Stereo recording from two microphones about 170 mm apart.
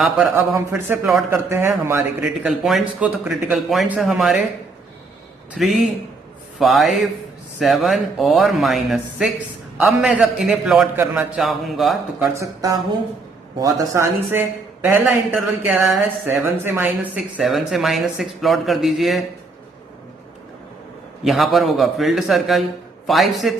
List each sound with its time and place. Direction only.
0.3 s speech: 10° right (ahead or behind)
2.5 s speech: centre (ahead or behind)
5.6 s speech: centre (ahead or behind)
12.3 s speech: 20° right (ahead or behind); by 19.2 s centre (ahead or behind)
21.2 s speech: centre (ahead or behind)